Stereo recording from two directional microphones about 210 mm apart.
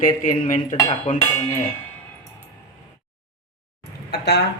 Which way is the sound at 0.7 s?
15° left (ahead or behind).